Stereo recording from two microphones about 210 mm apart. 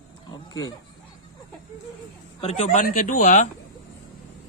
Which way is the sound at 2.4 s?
35° left (ahead or behind).